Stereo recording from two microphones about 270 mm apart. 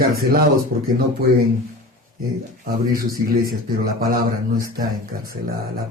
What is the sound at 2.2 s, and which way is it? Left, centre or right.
Speech, right.